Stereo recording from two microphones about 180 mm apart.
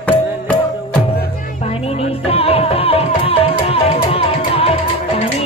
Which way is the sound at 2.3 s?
35° left (ahead or behind).